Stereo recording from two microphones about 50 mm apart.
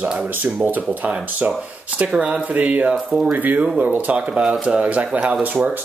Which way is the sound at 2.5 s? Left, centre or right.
Right.